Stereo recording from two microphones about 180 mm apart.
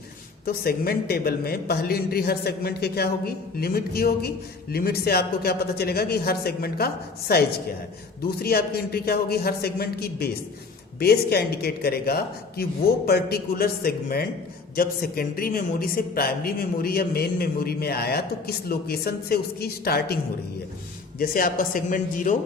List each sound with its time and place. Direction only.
0.4 s a man's voice: 55° left (ahead or behind)
21.2 s speech: 50° left (ahead or behind)